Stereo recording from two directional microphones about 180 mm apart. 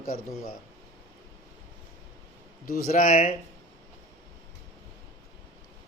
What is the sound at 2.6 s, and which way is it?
Speech, 50° left (ahead or behind).